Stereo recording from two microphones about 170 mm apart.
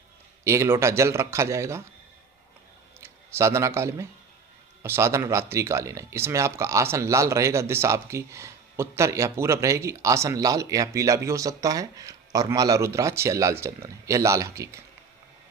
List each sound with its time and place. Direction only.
0.4 s speech: 15° right (ahead or behind)
3.0 s speech: 15° right (ahead or behind)